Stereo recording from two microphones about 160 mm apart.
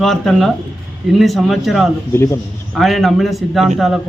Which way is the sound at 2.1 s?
15° left (ahead or behind).